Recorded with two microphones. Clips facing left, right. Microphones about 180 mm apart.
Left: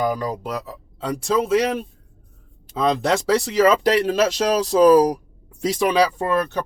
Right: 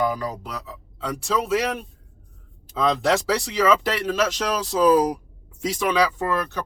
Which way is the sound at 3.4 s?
40° left (ahead or behind).